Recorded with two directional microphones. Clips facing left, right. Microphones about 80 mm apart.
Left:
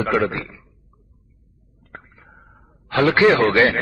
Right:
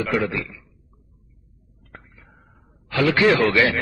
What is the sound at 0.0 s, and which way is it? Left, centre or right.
Speech, left.